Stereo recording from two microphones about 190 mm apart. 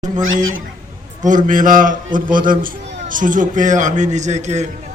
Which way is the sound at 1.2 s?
45° right (ahead or behind).